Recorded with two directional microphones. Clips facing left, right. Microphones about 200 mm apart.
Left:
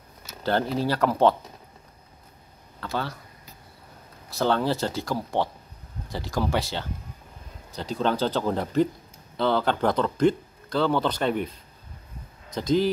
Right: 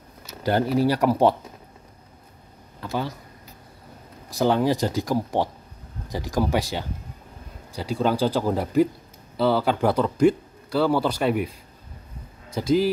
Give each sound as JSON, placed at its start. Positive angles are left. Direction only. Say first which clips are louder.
{"t": 0.4, "sound": "speech", "louder": "right 4 dB", "side_deg": -15}
{"t": 2.8, "sound": "speech", "louder": "right 2 dB", "side_deg": -15}
{"t": 4.3, "sound": "speech", "louder": "right 3 dB", "side_deg": -15}
{"t": 12.5, "sound": "speech", "louder": "right 2 dB", "side_deg": -5}